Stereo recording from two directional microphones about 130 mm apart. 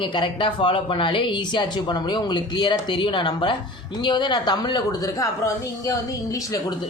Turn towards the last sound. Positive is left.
turn(degrees=25)  # may be behind; listen again after turning